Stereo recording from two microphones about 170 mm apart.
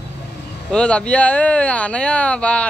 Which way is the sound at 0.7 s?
5° left (ahead or behind).